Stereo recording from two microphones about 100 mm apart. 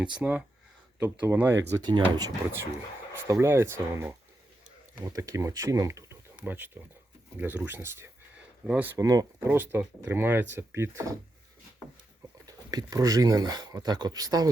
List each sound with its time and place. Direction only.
0.0 s speech: 10° right (ahead or behind)
1.8 s speech: 45° right (ahead or behind)
3.1 s speech: 30° right (ahead or behind)
6.4 s speech: 20° right (ahead or behind)
8.6 s speech: 15° right (ahead or behind)
9.0 s speech: 35° right (ahead or behind)
9.5 s speech: 20° right (ahead or behind)
12.5 s speech: 35° right (ahead or behind)